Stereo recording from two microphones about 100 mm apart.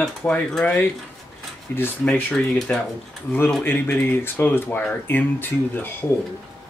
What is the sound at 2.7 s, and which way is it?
Mantra, 10° left (ahead or behind).